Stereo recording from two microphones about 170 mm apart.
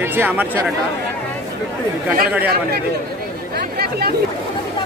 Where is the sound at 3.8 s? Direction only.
65° right (ahead or behind).